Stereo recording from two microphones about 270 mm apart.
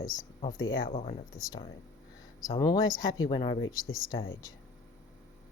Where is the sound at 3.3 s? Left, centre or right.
Centre.